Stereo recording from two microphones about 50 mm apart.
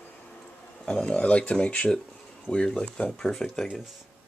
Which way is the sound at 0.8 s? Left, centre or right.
Left.